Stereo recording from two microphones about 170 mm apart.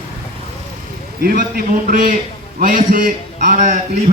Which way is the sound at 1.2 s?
60° right (ahead or behind).